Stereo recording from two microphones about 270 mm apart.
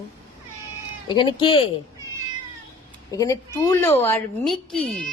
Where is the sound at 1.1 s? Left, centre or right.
Centre.